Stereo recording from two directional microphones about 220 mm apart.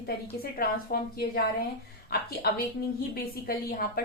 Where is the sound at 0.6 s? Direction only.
45° left (ahead or behind).